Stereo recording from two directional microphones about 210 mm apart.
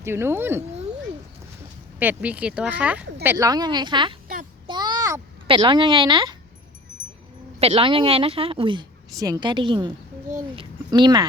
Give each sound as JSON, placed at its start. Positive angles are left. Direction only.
{"t": 0.0, "sound": "speech", "side_deg": -10}
{"t": 2.0, "sound": "a woman's voice", "side_deg": -5}
{"t": 4.6, "sound": "a sound", "side_deg": -20}
{"t": 7.6, "sound": "a woman's voice", "side_deg": -25}